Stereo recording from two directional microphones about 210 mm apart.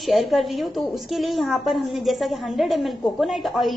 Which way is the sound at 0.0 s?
Centre (ahead or behind).